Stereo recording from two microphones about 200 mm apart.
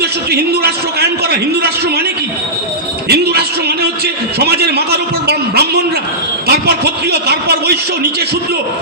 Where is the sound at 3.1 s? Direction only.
55° right (ahead or behind).